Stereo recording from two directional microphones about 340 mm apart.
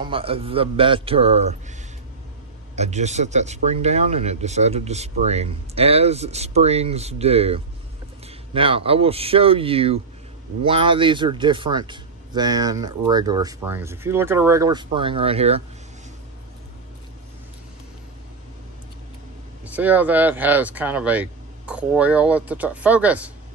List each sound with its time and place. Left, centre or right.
0.0 s speech: centre
2.7 s speech: centre
19.6 s speech: centre